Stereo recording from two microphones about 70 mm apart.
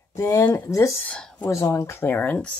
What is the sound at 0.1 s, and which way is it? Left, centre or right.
Speech, left.